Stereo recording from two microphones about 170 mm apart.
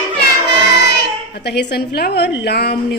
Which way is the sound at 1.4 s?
80° left.